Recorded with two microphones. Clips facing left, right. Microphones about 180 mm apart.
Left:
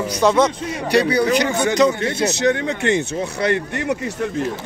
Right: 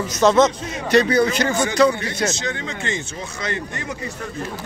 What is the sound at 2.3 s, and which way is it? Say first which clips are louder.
Speech: left 8 dB; 65° left (ahead or behind).